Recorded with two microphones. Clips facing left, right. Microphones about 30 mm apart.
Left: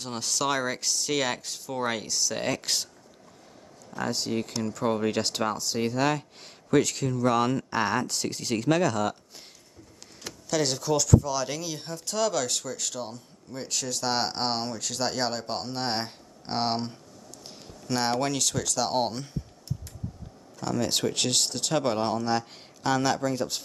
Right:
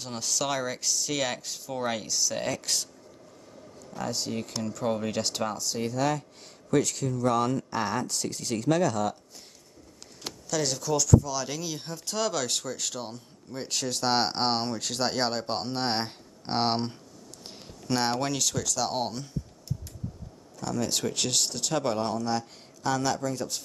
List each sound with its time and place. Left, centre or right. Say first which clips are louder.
0.0 s speech: left 2 dB; centre
2.4 s speech: left 2 dB; left
3.9 s speech: left 3 dB; centre; by 8.6 s left
8.6 s speech: even; left
10.5 s speech: left 2 dB; centre
20.6 s speech: left 2 dB; left